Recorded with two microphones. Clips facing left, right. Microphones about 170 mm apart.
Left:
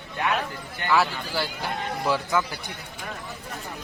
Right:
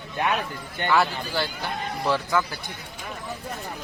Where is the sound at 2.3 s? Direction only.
20° left (ahead or behind).